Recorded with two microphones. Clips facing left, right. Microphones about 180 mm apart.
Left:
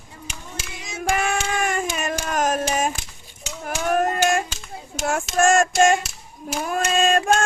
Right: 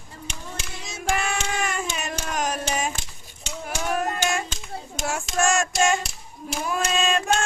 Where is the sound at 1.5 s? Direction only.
50° left (ahead or behind).